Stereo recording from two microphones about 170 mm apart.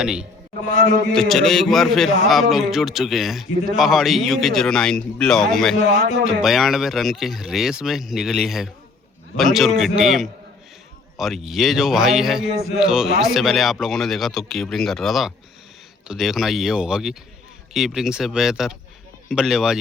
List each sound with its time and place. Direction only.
0.0 s a man's voice: 5° right (ahead or behind)
0.7 s a man's voice: 45° left (ahead or behind)
1.1 s a man's voice: centre (ahead or behind)
5.7 s a man's voice: 45° left (ahead or behind)
6.2 s a man's voice: centre (ahead or behind)
12.5 s music: 35° left (ahead or behind)
12.8 s a man's voice: 5° right (ahead or behind)